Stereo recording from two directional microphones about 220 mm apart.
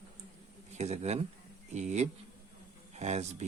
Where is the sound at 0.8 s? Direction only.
30° right (ahead or behind).